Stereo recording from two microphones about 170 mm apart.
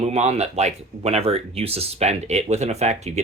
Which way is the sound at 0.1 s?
40° right (ahead or behind).